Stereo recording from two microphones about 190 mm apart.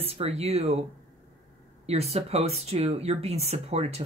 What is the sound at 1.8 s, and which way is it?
Speech, 35° right (ahead or behind).